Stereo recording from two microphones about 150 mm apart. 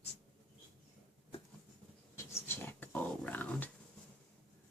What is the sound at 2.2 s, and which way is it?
Dog, 15° left (ahead or behind).